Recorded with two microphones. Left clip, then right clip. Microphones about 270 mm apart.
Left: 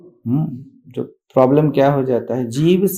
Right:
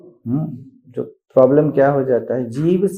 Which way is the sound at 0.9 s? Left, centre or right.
Left.